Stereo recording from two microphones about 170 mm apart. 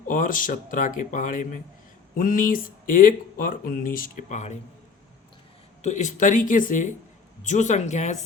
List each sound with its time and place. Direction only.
0.1 s speech: 50° left (ahead or behind)
5.8 s speech: 45° left (ahead or behind)